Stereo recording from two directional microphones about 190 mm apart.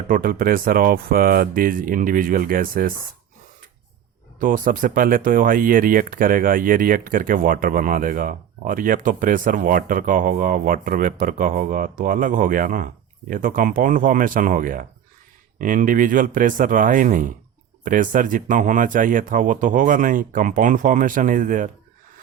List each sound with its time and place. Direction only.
0.1 s speech: 45° right (ahead or behind)
4.4 s speech: 45° right (ahead or behind)